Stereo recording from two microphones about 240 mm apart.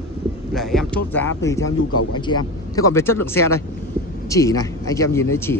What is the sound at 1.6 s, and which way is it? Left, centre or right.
Speech, left.